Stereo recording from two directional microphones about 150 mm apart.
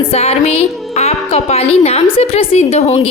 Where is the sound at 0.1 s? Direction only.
45° left (ahead or behind).